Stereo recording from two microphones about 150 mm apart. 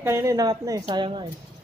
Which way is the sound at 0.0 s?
20° right (ahead or behind).